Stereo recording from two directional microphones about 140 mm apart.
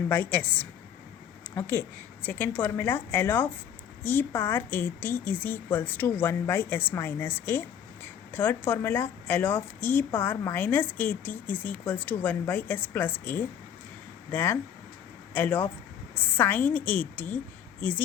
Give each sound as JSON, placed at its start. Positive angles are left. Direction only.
{"t": 0.1, "sound": "a woman's voice", "side_deg": 10}